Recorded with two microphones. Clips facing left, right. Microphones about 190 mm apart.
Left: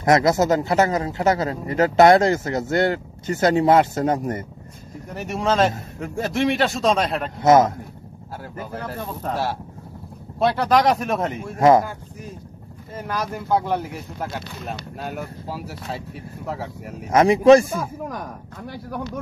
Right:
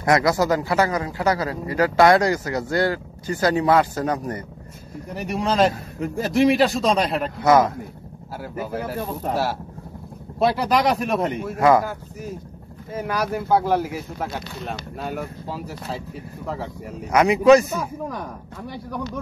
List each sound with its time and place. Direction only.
0.0 s a man's voice: 25° left (ahead or behind)
5.1 s speech: centre (ahead or behind)
7.3 s a man's voice: 25° left (ahead or behind)
8.5 s speech: 10° right (ahead or behind)
12.9 s speech: 10° right (ahead or behind)
17.1 s a man's voice: 40° left (ahead or behind)
17.4 s a man's voice: 30° left (ahead or behind)